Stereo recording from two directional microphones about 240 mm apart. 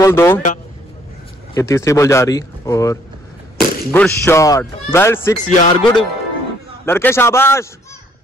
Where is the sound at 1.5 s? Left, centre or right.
Centre.